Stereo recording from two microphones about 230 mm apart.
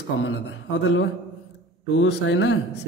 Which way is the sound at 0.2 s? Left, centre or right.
Left.